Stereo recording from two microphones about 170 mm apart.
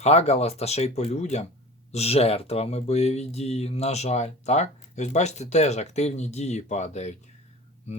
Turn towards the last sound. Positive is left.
turn(degrees=40)  # may be behind; listen again after turning